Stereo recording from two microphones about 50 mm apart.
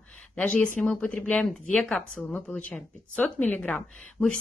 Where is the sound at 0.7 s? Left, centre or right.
Left.